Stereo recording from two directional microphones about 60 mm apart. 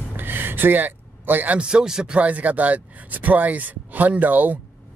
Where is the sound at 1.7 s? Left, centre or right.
Centre.